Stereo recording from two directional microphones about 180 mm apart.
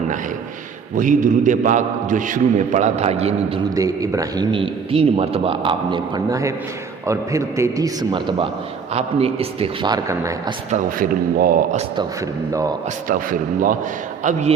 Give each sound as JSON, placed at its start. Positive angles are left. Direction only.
{"t": 0.9, "sound": "a man's voice", "side_deg": -45}
{"t": 3.8, "sound": "a man's voice", "side_deg": -20}
{"t": 8.9, "sound": "a man's voice", "side_deg": -35}
{"t": 10.7, "sound": "a man's voice", "side_deg": -50}
{"t": 13.1, "sound": "a man's voice", "side_deg": -50}